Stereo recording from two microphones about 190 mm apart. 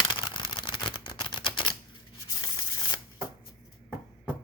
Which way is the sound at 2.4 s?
20° left (ahead or behind).